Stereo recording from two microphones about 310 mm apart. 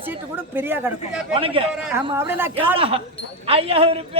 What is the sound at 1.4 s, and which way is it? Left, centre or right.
Speech, centre.